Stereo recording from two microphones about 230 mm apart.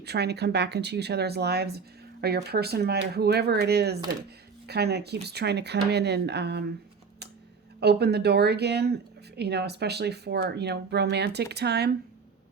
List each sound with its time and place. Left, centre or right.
0.0 s speech: right
7.8 s speech: right